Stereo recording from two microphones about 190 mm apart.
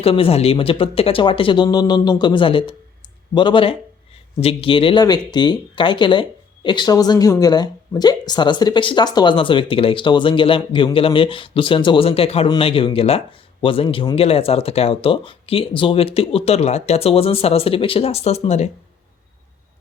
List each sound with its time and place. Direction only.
0.0 s speech: 30° left (ahead or behind)